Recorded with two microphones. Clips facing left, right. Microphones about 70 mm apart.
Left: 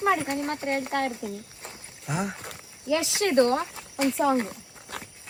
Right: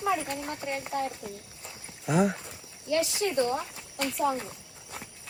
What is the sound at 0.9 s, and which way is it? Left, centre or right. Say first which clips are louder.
Speech: left 2 dB; left.